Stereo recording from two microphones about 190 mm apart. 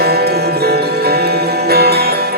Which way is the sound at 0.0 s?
55° right (ahead or behind).